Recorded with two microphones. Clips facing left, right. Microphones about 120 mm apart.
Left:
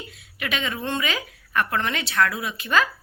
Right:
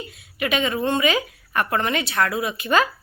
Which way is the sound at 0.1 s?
50° right (ahead or behind).